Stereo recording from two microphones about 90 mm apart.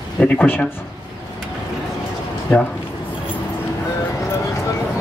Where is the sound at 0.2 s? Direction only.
10° left (ahead or behind).